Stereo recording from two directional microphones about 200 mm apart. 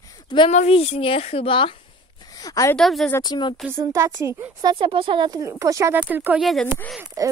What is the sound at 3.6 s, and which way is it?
Speech, 10° right (ahead or behind).